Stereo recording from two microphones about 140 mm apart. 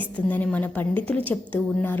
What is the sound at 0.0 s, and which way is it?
A woman's voice, 10° left (ahead or behind).